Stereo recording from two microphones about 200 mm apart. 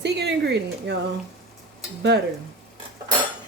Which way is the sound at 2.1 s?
55° right (ahead or behind).